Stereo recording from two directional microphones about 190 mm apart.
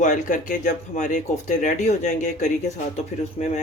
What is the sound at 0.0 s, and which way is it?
Speech, 40° left (ahead or behind).